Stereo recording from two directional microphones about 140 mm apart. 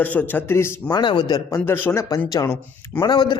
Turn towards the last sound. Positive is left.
turn(degrees=30)  # may be behind; listen again after turning